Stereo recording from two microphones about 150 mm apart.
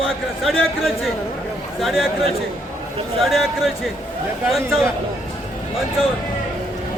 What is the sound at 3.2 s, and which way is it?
A man's voice, centre (ahead or behind).